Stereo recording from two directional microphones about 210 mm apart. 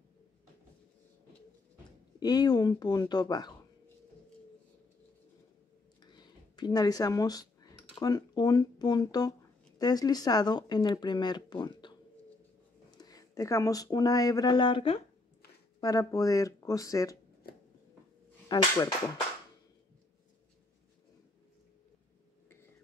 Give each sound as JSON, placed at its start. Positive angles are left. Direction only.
{"t": 2.1, "sound": "speech", "side_deg": 20}
{"t": 6.0, "sound": "a sound", "side_deg": 20}
{"t": 8.0, "sound": "speech", "side_deg": 20}
{"t": 12.9, "sound": "speech", "side_deg": 20}
{"t": 18.5, "sound": "speech", "side_deg": 20}